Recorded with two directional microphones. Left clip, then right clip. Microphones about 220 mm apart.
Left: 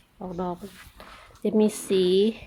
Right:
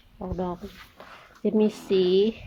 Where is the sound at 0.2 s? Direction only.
10° left (ahead or behind).